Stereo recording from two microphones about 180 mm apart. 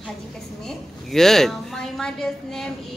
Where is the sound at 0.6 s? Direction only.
Centre (ahead or behind).